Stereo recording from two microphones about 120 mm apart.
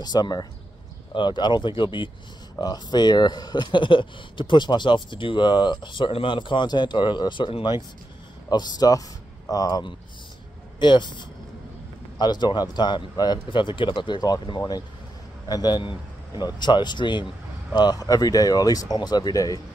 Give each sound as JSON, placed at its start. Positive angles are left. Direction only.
{"t": 0.0, "sound": "speech", "side_deg": 35}